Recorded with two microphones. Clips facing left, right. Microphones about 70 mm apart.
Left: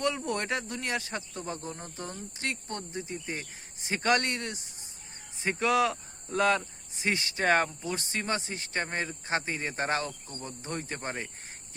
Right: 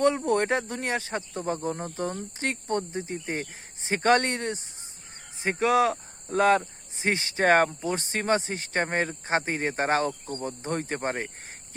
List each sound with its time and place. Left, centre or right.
0.0 s speech: right